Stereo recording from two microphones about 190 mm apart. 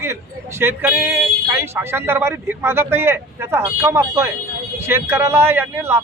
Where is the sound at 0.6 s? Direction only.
10° right (ahead or behind).